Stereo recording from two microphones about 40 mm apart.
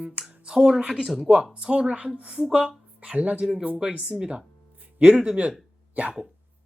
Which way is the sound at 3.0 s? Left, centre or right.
Right.